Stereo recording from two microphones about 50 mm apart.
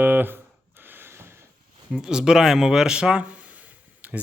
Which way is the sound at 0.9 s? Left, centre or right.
Right.